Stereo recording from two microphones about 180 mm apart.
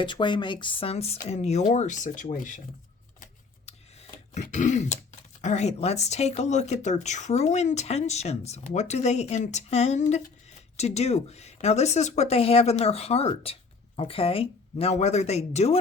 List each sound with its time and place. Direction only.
0.0 s speech: 25° left (ahead or behind); by 2.6 s 45° left (ahead or behind)
3.7 s throat clearing: 40° left (ahead or behind)
5.4 s speech: 40° left (ahead or behind)